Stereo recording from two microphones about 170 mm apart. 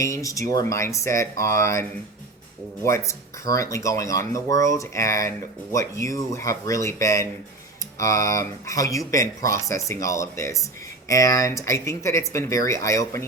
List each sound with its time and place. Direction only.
0.0 s speech: 20° left (ahead or behind)